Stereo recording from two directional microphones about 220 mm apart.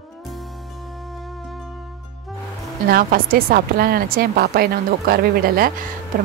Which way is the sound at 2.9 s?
40° right (ahead or behind).